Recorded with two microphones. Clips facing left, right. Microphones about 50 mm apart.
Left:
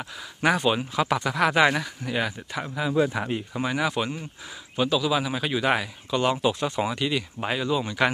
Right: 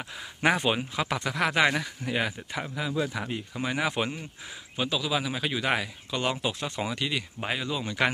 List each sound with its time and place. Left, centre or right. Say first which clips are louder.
0.4 s speech: left 2 dB; centre
0.7 s speech: left 5 dB; centre
2.0 s speech: left 1 dB; centre
2.6 s speech: left 4 dB; centre
3.0 s speech: left 7 dB; left
3.3 s speech: left 5 dB; left
3.7 s speech: left 2 dB; centre
4.7 s speech: left 5 dB; centre